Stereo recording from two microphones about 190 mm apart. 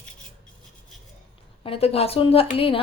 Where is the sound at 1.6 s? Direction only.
30° left (ahead or behind).